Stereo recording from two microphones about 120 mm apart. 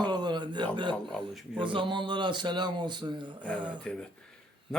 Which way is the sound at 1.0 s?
5° left (ahead or behind).